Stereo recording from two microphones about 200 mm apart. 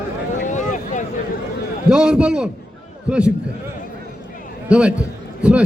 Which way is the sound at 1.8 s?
5° right (ahead or behind).